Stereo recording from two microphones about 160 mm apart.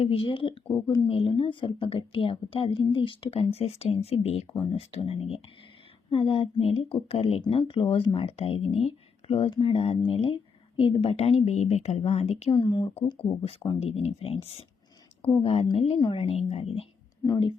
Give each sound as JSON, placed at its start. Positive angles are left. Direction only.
{"t": 0.0, "sound": "speech", "side_deg": 35}
{"t": 0.7, "sound": "speech", "side_deg": 20}
{"t": 1.0, "sound": "speech", "side_deg": 35}
{"t": 12.5, "sound": "speech", "side_deg": 30}
{"t": 17.2, "sound": "speech", "side_deg": 25}